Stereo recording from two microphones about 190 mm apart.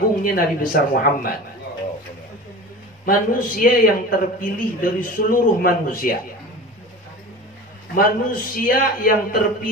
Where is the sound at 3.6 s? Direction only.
50° left (ahead or behind).